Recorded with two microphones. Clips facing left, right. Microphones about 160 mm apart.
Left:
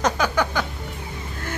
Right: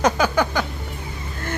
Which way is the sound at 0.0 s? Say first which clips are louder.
Right 3 dB; centre (ahead or behind).